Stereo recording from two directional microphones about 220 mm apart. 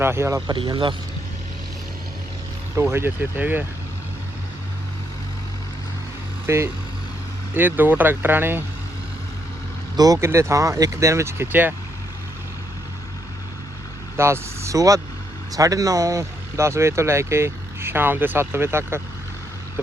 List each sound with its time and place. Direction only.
0.0 s speech: 10° right (ahead or behind)
2.7 s speech: 10° right (ahead or behind)
6.5 s speech: 10° right (ahead or behind)
10.0 s speech: 15° right (ahead or behind)
14.2 s speech: 10° right (ahead or behind)